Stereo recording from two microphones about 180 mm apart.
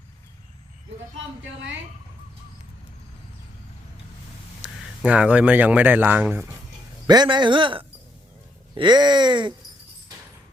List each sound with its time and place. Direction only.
4.6 s speech: 5° right (ahead or behind)
7.1 s speech: 25° right (ahead or behind)